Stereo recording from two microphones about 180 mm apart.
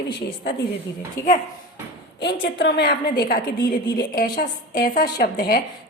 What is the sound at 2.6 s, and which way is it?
A woman's voice, 65° left (ahead or behind).